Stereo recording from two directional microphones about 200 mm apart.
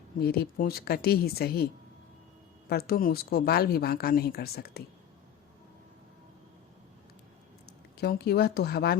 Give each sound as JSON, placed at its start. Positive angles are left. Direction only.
{"t": 0.2, "sound": "speech", "side_deg": 50}
{"t": 2.6, "sound": "speech", "side_deg": 50}
{"t": 7.9, "sound": "speech", "side_deg": 55}